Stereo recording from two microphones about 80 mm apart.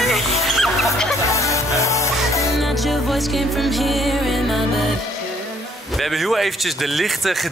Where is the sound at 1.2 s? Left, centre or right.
Left.